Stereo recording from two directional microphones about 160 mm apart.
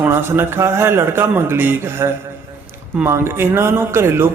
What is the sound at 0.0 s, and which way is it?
A man's voice, 15° right (ahead or behind).